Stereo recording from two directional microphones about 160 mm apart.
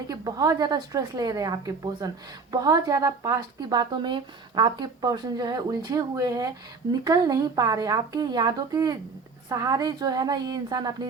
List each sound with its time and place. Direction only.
0.1 s a woman's voice: 25° right (ahead or behind)